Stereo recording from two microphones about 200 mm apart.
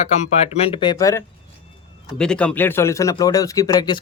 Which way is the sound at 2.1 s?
5° left (ahead or behind).